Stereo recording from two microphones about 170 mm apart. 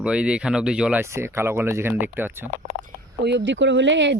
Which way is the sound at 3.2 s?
85° right.